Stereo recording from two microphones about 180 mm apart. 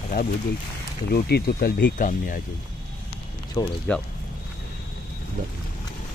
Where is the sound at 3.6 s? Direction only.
20° left (ahead or behind).